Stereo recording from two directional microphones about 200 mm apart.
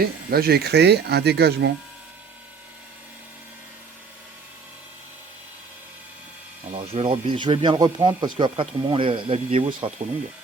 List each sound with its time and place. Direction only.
0.0 s speech: 50° right (ahead or behind)
6.7 s speech: 30° right (ahead or behind)